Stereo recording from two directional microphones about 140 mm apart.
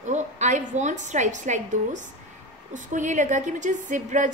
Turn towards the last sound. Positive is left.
turn(degrees=-60)  # may be behind; listen again after turning